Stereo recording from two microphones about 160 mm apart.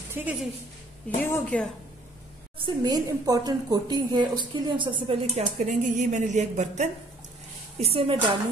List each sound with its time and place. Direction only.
0.1 s a woman's voice: 10° right (ahead or behind)
1.2 s a woman's voice: 10° left (ahead or behind)
2.6 s a woman's voice: 25° right (ahead or behind)
5.7 s a sound: 50° right (ahead or behind)
7.8 s speech: 35° right (ahead or behind)